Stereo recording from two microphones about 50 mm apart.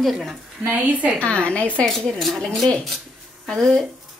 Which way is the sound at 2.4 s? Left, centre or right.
Centre.